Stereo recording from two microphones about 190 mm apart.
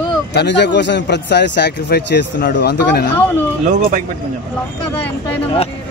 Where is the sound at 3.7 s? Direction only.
45° right (ahead or behind).